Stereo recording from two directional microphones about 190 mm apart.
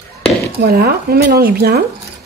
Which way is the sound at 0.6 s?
55° right (ahead or behind).